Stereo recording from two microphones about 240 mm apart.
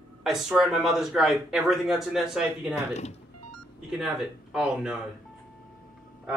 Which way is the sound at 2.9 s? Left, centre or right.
Left.